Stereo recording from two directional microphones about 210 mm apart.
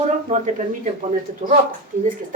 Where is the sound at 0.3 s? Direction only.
35° right (ahead or behind).